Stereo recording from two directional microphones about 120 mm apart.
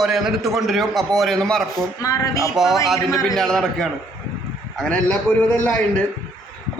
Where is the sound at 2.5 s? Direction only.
5° right (ahead or behind).